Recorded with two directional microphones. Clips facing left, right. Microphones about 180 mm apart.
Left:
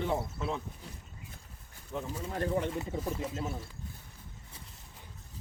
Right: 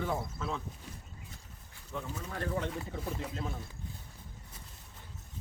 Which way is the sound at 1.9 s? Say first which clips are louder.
Left 3 dB; 20° left (ahead or behind).